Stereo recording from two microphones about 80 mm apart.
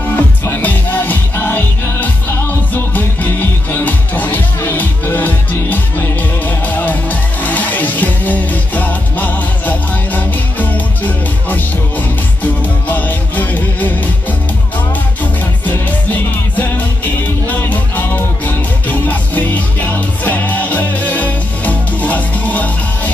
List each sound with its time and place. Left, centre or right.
0.1 s music: left
12.8 s music: left
15.6 s music: left